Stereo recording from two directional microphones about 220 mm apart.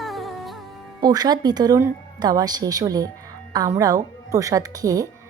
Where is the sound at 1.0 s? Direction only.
20° right (ahead or behind).